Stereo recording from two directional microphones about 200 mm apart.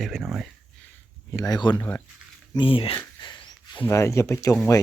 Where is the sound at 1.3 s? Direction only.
20° left (ahead or behind).